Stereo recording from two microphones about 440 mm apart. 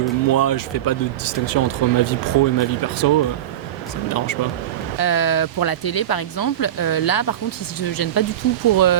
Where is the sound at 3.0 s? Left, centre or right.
Left.